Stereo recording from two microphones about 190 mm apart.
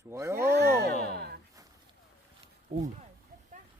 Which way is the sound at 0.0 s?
15° right (ahead or behind).